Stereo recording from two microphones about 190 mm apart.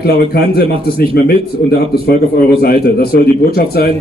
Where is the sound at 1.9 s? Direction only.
50° left (ahead or behind).